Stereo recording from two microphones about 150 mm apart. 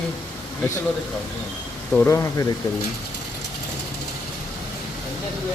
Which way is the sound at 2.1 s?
20° left (ahead or behind).